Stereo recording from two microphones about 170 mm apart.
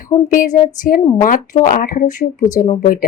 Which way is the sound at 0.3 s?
50° left (ahead or behind).